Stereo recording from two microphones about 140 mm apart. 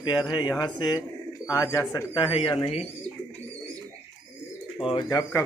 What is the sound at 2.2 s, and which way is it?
Speech, 40° left (ahead or behind).